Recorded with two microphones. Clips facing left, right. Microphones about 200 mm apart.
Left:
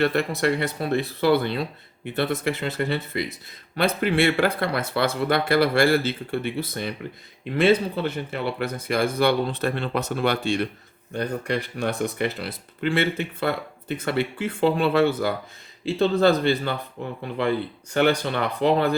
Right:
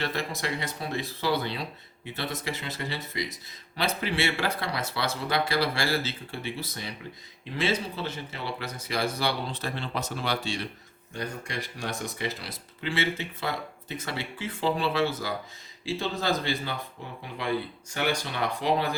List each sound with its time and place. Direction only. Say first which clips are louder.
0.0 s speech: left 10 dB; 60° left (ahead or behind)